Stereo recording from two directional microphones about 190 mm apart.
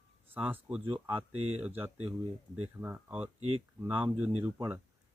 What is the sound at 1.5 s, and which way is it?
Speech, 10° right (ahead or behind).